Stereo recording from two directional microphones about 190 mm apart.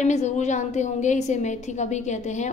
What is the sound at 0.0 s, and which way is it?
A woman's voice, 35° left (ahead or behind).